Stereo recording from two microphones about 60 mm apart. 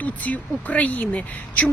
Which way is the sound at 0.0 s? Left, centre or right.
Left.